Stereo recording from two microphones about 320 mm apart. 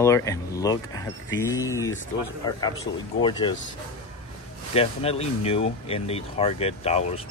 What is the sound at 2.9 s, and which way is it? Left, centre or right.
Speech, left.